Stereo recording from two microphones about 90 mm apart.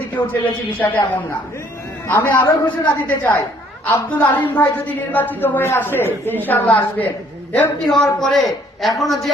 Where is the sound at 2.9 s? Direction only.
20° left (ahead or behind).